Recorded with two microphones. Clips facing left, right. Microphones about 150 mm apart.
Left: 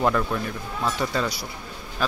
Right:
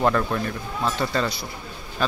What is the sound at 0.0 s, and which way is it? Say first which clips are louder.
Speech: right 1 dB; centre (ahead or behind).